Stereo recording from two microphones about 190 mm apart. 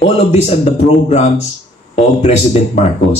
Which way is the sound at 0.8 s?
35° left (ahead or behind).